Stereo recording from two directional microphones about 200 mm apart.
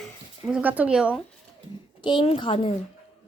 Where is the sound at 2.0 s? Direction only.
25° left (ahead or behind).